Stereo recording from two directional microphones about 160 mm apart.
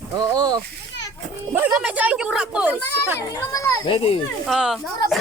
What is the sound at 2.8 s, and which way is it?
Speech, 20° left (ahead or behind).